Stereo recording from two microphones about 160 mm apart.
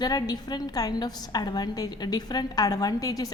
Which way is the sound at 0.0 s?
25° left (ahead or behind).